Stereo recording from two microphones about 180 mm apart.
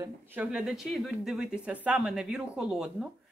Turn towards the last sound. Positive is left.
turn(degrees=-5)  # may be behind; listen again after turning